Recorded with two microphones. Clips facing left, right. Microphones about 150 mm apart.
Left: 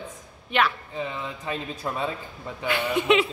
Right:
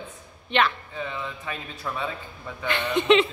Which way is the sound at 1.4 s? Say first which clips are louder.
Left 4 dB; 30° left (ahead or behind).